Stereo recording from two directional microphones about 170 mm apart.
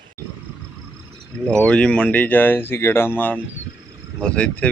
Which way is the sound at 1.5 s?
5° left (ahead or behind).